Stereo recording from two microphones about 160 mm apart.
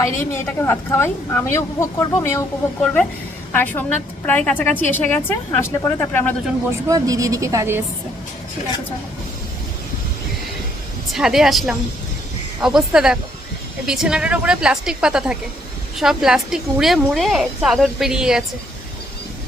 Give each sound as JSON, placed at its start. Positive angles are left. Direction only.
{"t": 0.0, "sound": "a woman's voice", "side_deg": 15}
{"t": 2.8, "sound": "a woman's voice", "side_deg": 5}
{"t": 6.7, "sound": "speech", "side_deg": -20}
{"t": 11.1, "sound": "speech", "side_deg": -5}